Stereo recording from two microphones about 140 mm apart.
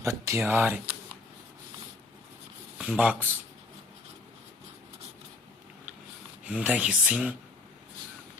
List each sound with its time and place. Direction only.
0.0 s speech: 20° right (ahead or behind)
2.7 s speech: 10° right (ahead or behind)
6.4 s speech: 10° right (ahead or behind)